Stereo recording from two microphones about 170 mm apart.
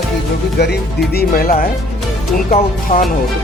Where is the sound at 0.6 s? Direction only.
75° left (ahead or behind).